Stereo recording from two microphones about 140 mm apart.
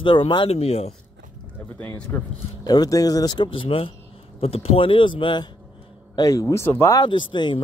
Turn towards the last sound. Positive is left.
turn(degrees=35)  # may be behind; listen again after turning